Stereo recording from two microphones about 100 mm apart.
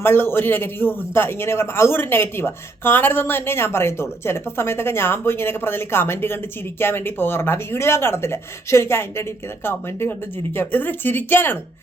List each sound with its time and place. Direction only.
0.0 s a man's voice: 25° left (ahead or behind)